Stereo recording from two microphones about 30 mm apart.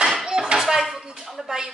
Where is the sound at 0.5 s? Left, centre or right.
Centre.